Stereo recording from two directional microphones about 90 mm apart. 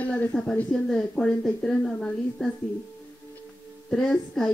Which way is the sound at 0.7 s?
5° left (ahead or behind).